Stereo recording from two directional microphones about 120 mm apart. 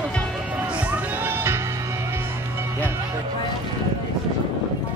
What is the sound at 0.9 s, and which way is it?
Music, 20° right (ahead or behind).